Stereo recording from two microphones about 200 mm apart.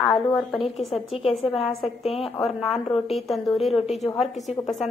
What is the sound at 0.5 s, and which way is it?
Speech, 30° left (ahead or behind).